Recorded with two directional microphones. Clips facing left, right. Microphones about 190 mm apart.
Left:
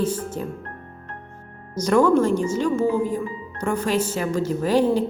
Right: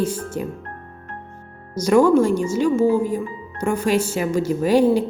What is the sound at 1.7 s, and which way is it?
Speech, 10° right (ahead or behind).